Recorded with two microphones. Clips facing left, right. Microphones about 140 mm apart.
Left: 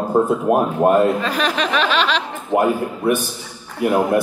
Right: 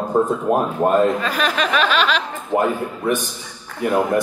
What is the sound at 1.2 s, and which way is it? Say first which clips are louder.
Speech: left 1 dB; 20° left (ahead or behind).